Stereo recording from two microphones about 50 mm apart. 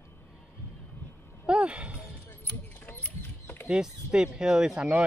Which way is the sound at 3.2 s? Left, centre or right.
Left.